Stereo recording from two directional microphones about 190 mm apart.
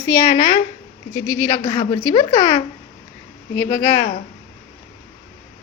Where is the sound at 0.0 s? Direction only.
15° left (ahead or behind).